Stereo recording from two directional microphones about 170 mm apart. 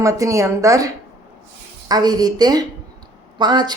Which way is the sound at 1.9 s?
25° right (ahead or behind).